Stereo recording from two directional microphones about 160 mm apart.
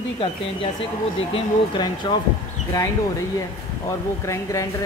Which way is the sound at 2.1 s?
35° left (ahead or behind).